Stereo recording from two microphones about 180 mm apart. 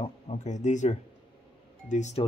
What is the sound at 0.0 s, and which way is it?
Speech, 40° left (ahead or behind).